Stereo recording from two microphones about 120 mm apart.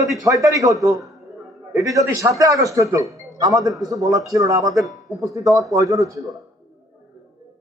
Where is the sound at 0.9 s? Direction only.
Centre (ahead or behind).